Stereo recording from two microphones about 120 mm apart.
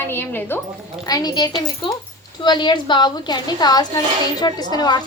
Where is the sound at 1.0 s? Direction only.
35° left (ahead or behind).